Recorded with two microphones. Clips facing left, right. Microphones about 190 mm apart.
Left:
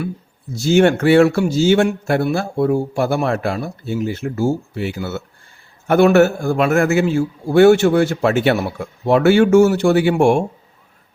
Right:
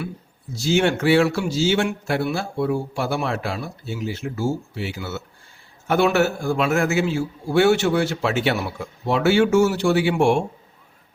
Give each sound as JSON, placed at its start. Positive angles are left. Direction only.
{"t": 0.5, "sound": "a man's voice", "side_deg": 50}